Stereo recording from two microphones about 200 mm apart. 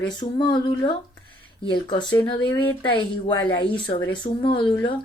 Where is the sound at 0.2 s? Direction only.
20° left (ahead or behind).